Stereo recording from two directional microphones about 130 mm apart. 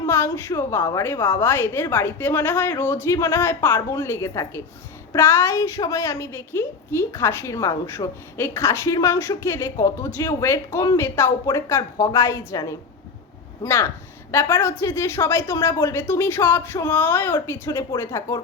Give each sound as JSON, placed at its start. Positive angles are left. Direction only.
{"t": 0.0, "sound": "a woman's voice", "side_deg": 20}